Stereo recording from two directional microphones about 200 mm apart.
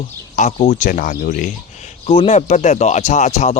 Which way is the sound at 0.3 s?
35° left (ahead or behind).